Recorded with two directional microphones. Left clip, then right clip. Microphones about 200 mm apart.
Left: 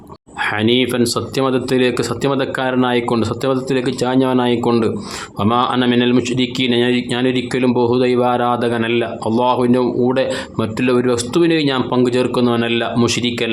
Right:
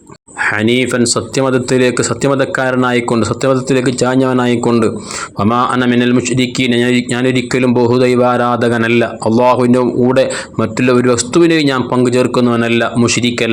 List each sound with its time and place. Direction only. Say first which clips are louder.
0.3 s speech: right 3 dB; 20° right (ahead or behind)